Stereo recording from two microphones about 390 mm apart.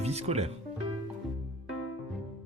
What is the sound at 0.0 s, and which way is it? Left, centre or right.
Speech, centre.